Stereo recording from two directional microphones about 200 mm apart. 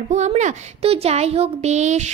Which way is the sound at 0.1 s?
35° right (ahead or behind).